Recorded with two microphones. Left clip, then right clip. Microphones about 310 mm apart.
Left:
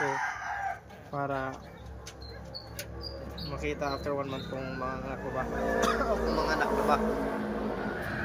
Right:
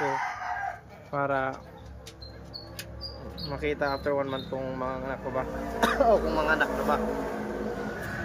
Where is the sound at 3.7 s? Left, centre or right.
Centre.